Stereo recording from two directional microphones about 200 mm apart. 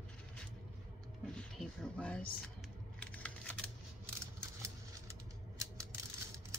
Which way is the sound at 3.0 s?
5° left (ahead or behind).